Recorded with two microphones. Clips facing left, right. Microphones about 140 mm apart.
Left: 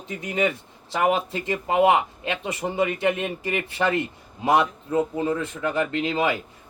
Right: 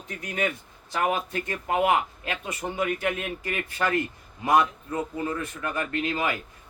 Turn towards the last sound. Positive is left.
turn(degrees=25)  # may be behind; listen again after turning